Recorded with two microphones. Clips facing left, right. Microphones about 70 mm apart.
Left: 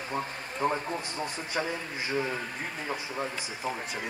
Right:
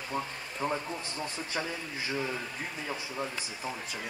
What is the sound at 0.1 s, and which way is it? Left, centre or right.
Speech, left.